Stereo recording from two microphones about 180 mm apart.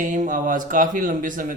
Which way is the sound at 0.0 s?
45° right (ahead or behind).